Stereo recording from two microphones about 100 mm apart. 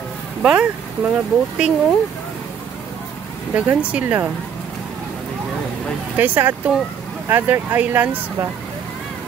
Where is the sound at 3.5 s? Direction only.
15° right (ahead or behind).